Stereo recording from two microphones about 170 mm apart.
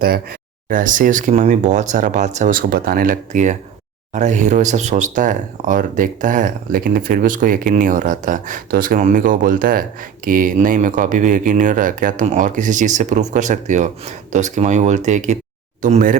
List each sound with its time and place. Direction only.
0.0 s speech: 60° right (ahead or behind)